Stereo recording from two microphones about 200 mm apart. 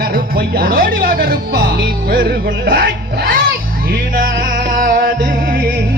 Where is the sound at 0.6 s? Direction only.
45° right (ahead or behind).